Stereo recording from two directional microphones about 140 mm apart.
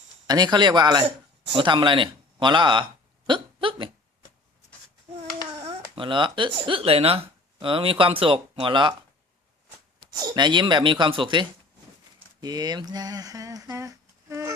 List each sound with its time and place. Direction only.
0.3 s speech: 30° right (ahead or behind)
3.2 s hiccup: 35° right (ahead or behind)
6.0 s speech: 35° right (ahead or behind)
10.1 s speech: 30° right (ahead or behind)